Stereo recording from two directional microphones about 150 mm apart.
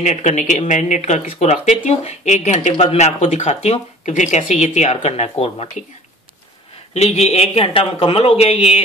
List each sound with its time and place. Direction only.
0.0 s speech: 50° left (ahead or behind)
6.9 s speech: 45° left (ahead or behind)